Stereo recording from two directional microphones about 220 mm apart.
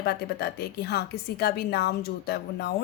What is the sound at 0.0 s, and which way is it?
A woman's voice, 45° left (ahead or behind).